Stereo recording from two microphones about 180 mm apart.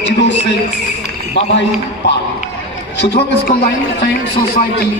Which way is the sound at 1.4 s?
75° left (ahead or behind).